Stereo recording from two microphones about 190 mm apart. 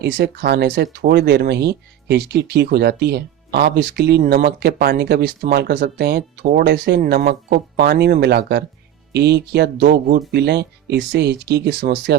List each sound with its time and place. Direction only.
0.0 s speech: 60° right (ahead or behind)